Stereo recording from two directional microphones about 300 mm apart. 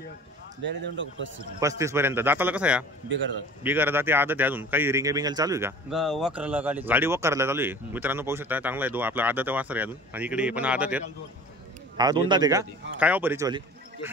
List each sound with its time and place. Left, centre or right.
0.7 s speech: right
1.6 s a man's voice: centre
3.1 s speech: right
3.6 s a man's voice: centre